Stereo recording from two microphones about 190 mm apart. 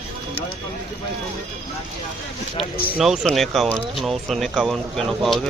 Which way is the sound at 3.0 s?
Centre (ahead or behind).